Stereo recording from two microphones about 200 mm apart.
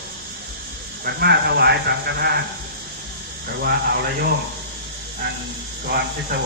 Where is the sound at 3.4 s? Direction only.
55° right (ahead or behind).